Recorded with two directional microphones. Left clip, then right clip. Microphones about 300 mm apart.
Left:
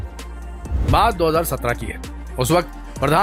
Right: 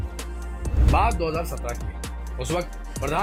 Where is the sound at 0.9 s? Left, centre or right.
Centre.